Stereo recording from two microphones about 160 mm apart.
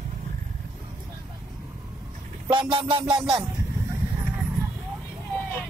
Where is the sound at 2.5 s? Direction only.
30° right (ahead or behind).